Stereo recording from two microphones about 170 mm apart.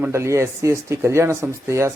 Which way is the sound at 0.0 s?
15° right (ahead or behind).